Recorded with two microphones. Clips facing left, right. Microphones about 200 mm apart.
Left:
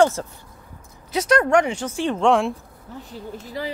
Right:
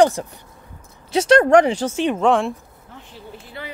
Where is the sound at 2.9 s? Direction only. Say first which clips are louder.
Left 5 dB; 40° left (ahead or behind).